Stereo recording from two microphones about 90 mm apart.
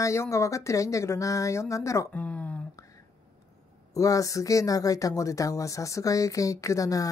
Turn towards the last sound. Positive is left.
turn(degrees=40)  # may be behind; listen again after turning